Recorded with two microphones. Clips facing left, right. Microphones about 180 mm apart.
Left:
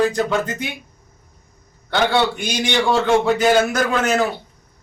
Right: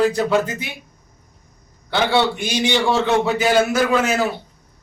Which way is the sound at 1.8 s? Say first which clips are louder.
Even; 5° right (ahead or behind).